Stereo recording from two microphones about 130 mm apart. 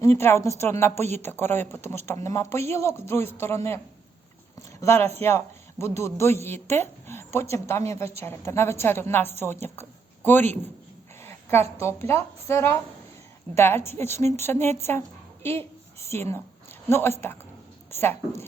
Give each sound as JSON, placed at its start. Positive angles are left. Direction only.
{"t": 0.0, "sound": "speech", "side_deg": 20}
{"t": 4.8, "sound": "a woman's voice", "side_deg": 20}
{"t": 11.2, "sound": "a sound", "side_deg": 20}
{"t": 11.8, "sound": "a woman's voice", "side_deg": 20}